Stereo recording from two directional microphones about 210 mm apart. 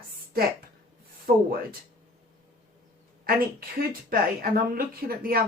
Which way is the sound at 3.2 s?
45° right (ahead or behind).